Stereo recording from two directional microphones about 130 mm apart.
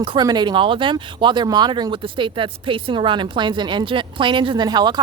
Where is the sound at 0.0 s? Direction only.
35° right (ahead or behind).